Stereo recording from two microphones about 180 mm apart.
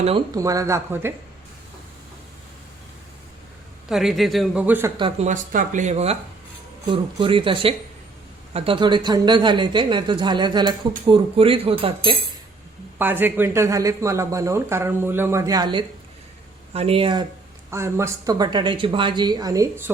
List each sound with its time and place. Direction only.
0.3 s speech: 20° right (ahead or behind)
3.8 s a man's voice: centre (ahead or behind)
5.2 s speech: 45° right (ahead or behind)
13.0 s speech: 10° right (ahead or behind); by 17.2 s 25° right (ahead or behind)
17.7 s speech: 15° right (ahead or behind)